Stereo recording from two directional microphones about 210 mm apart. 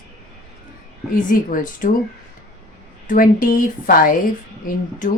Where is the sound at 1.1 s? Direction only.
40° left (ahead or behind).